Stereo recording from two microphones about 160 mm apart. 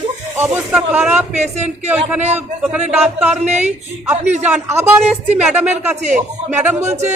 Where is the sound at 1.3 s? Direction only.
45° right (ahead or behind).